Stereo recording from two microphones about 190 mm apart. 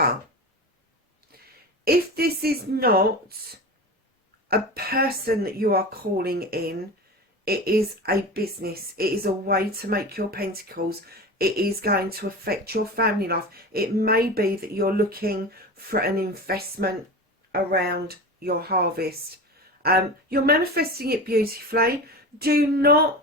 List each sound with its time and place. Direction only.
1.8 s speech: 55° right (ahead or behind)